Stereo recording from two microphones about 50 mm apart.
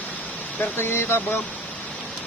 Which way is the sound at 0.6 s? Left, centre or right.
Left.